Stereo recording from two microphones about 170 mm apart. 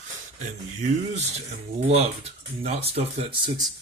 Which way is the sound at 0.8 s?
40° right (ahead or behind).